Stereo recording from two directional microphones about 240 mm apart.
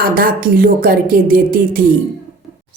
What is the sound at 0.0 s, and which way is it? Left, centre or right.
A woman's voice, right.